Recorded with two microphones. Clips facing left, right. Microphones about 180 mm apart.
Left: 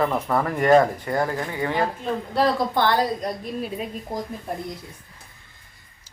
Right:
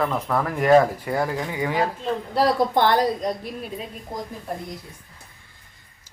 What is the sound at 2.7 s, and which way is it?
Speech, 20° right (ahead or behind).